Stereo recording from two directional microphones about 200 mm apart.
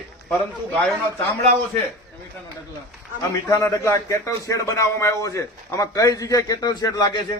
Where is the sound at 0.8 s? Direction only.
10° left (ahead or behind).